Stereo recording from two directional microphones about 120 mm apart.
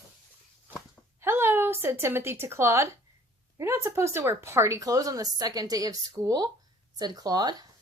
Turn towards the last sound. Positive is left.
turn(degrees=-35)  # may be behind; listen again after turning